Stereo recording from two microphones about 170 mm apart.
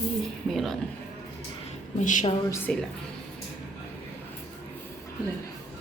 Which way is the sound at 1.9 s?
45° left (ahead or behind).